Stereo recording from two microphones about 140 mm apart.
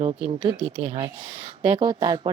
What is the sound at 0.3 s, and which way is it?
Speech, 35° right (ahead or behind).